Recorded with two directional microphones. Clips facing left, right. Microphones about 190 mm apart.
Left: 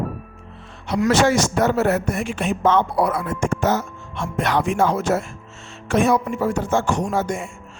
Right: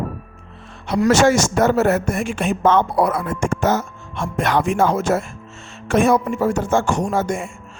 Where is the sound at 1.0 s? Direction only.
45° right (ahead or behind).